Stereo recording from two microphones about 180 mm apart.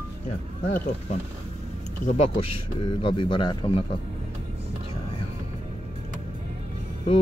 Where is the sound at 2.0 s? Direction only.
35° left (ahead or behind).